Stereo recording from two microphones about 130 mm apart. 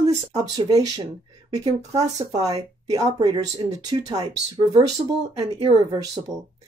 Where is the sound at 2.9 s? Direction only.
30° right (ahead or behind).